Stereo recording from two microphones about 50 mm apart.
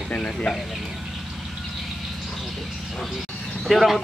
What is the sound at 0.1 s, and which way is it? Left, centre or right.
Speech, left.